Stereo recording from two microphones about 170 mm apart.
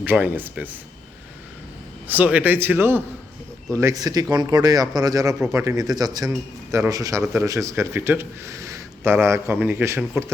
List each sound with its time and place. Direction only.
0.0 s a man's voice: 10° right (ahead or behind)
2.0 s a man's voice: 10° right (ahead or behind)